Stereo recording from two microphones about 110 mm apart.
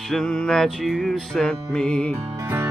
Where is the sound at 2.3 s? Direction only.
20° right (ahead or behind).